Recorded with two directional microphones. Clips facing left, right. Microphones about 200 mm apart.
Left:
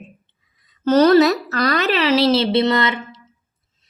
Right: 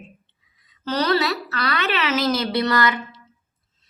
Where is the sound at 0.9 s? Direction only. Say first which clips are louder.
Left 9 dB; 45° left (ahead or behind).